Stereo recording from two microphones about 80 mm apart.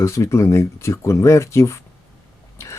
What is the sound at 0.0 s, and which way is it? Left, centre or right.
Speech, left.